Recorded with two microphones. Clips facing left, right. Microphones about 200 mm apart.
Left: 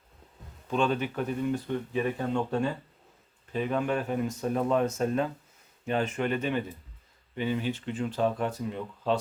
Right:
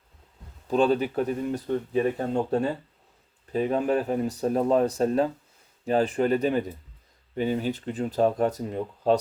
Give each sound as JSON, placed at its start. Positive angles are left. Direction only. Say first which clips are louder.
{"t": 0.7, "sound": "speech", "louder": "right 5 dB", "side_deg": -35}